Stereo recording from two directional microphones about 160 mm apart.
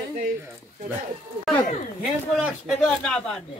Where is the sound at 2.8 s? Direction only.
5° left (ahead or behind).